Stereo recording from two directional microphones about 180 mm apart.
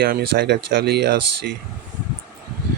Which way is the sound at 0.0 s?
60° right (ahead or behind).